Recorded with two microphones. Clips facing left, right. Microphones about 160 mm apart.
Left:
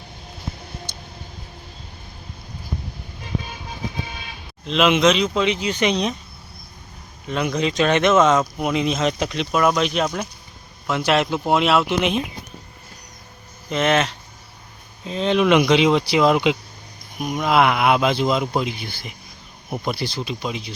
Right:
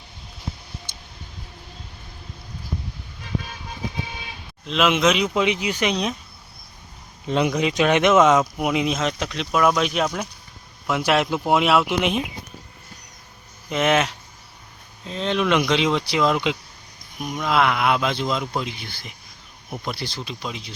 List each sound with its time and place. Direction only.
4.6 s speech: centre (ahead or behind)
7.3 s speech: 25° right (ahead or behind)
7.5 s speech: 15° right (ahead or behind)
13.7 s speech: 10° right (ahead or behind)
15.0 s speech: 5° left (ahead or behind)